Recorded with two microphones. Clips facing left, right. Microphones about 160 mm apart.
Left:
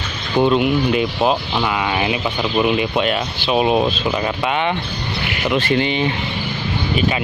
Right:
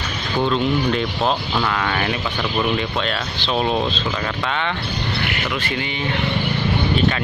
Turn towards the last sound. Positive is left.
turn(degrees=20)  # may be behind; listen again after turning